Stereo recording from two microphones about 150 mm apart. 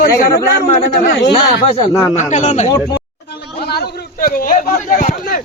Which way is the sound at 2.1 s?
55° left (ahead or behind).